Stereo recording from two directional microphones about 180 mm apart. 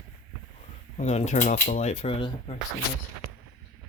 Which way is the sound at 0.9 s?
40° left (ahead or behind).